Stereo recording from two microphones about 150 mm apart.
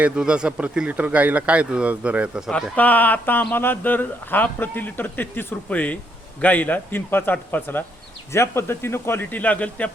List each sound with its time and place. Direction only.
0.0 s speech: 5° right (ahead or behind)
2.5 s speech: 5° left (ahead or behind)